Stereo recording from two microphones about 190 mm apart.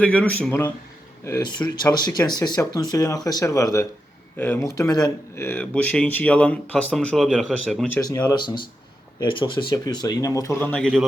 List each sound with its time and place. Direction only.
0.0 s speech: 5° left (ahead or behind)
7.9 s speech: 15° left (ahead or behind)